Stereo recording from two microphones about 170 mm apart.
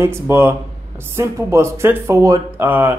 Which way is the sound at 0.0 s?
15° right (ahead or behind).